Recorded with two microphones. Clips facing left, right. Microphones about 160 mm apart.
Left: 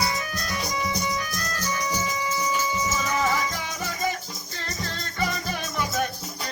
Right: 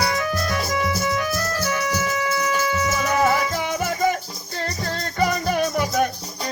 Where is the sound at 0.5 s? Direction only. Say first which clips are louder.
Right 5 dB; 70° right (ahead or behind).